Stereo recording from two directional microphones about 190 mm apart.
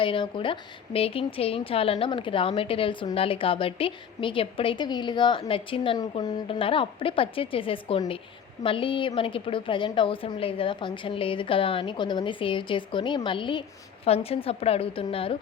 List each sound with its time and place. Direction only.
0.0 s speech: 25° left (ahead or behind)